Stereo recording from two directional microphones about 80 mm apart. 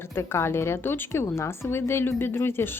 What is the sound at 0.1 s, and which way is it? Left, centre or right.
A woman's voice, left.